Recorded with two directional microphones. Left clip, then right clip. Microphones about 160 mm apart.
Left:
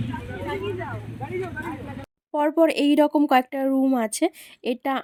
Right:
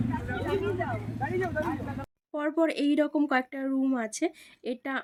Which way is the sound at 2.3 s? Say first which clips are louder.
Left 8 dB; 40° left (ahead or behind).